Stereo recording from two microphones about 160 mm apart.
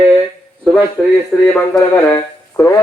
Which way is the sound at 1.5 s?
10° left (ahead or behind).